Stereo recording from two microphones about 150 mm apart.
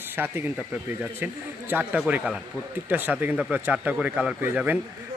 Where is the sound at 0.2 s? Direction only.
10° right (ahead or behind).